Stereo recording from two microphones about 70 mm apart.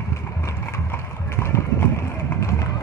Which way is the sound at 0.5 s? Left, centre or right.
Left.